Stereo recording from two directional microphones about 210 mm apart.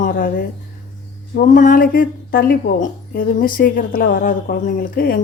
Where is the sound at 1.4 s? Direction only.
40° left (ahead or behind).